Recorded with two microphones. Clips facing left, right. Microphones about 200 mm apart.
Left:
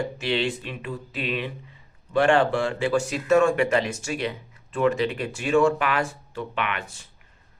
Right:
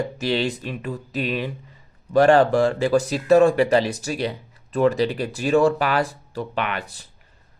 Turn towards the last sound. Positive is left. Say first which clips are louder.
# right 3 dB
turn(degrees=-35)  # may be behind; listen again after turning